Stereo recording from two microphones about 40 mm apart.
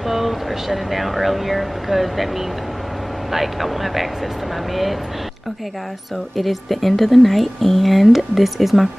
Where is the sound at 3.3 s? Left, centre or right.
Centre.